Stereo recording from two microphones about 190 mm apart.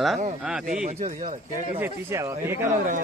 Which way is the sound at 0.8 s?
35° right (ahead or behind).